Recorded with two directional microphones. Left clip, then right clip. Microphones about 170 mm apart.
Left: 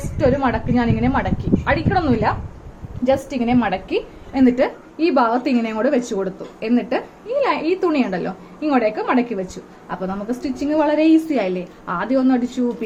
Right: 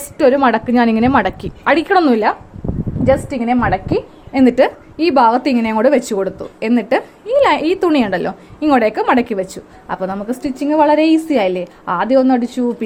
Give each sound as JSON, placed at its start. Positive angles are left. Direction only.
{"t": 0.2, "sound": "a woman's voice", "side_deg": -65}
{"t": 3.1, "sound": "a woman's voice", "side_deg": -25}
{"t": 4.3, "sound": "a woman's voice", "side_deg": -55}